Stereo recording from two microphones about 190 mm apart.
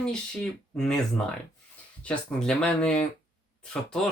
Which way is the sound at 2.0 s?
5° left (ahead or behind).